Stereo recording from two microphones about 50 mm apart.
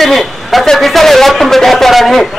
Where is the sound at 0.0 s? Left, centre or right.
Centre.